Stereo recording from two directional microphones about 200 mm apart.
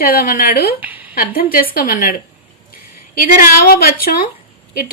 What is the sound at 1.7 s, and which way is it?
Speech, 45° left (ahead or behind).